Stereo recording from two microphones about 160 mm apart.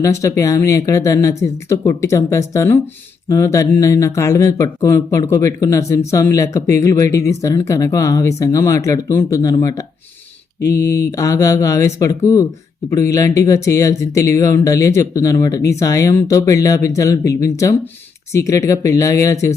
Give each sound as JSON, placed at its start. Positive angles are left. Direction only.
{"t": 0.0, "sound": "speech", "side_deg": 20}